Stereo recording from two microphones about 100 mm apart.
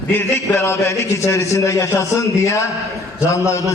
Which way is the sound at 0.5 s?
30° left (ahead or behind).